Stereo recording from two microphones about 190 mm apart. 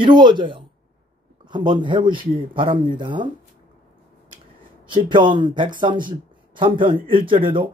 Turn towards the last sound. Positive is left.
turn(degrees=-25)  # may be behind; listen again after turning